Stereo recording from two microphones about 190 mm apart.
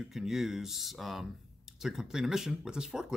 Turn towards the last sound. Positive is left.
turn(degrees=-5)  # may be behind; listen again after turning